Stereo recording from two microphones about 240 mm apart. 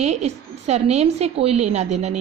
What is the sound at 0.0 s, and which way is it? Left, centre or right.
A woman's voice, right.